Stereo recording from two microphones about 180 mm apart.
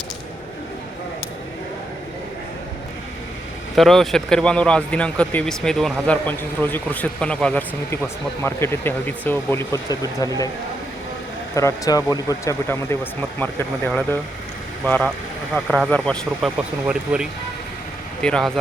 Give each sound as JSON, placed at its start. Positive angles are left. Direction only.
{"t": 3.8, "sound": "speech", "side_deg": 0}
{"t": 11.5, "sound": "speech", "side_deg": 15}
{"t": 18.2, "sound": "speech", "side_deg": 5}